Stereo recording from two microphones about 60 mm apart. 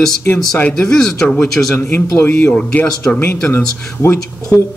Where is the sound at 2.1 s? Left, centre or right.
Left.